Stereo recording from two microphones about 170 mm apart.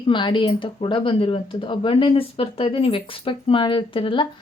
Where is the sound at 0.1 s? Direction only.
30° left (ahead or behind).